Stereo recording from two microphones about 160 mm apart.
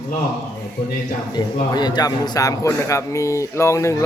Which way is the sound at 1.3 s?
25° left (ahead or behind).